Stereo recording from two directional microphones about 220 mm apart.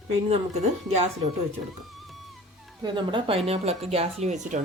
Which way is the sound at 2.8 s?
20° right (ahead or behind).